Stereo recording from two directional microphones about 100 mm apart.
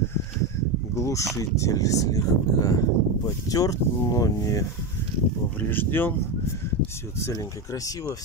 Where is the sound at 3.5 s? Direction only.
35° left (ahead or behind).